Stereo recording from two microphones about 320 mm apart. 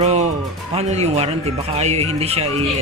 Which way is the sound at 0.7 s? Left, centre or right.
Centre.